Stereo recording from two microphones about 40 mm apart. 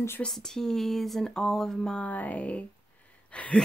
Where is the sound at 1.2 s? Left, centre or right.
Centre.